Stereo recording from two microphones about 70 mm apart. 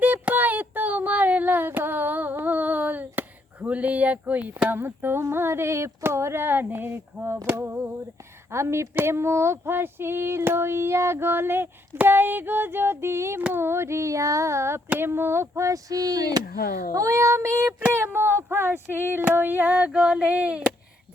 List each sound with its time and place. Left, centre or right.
0.0 s a sound: right
5.3 s female singing: right
13.5 s speech: right
16.9 s speech: right; by 20.7 s centre